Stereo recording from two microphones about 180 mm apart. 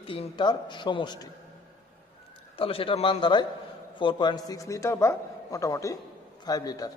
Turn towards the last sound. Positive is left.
turn(degrees=20)  # may be behind; listen again after turning